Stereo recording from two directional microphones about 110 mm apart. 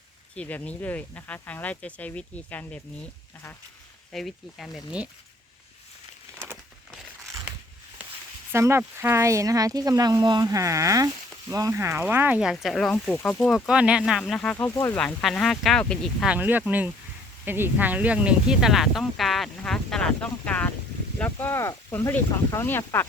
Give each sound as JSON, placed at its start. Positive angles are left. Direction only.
{"t": 0.3, "sound": "speech", "side_deg": 15}
{"t": 4.1, "sound": "speech", "side_deg": 0}
{"t": 8.5, "sound": "speech", "side_deg": -25}
{"t": 12.4, "sound": "speech", "side_deg": -5}
{"t": 13.5, "sound": "speech", "side_deg": -10}
{"t": 14.9, "sound": "speech", "side_deg": 5}
{"t": 16.2, "sound": "speech", "side_deg": -15}